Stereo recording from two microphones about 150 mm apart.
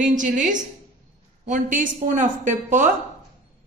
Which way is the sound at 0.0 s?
60° right (ahead or behind).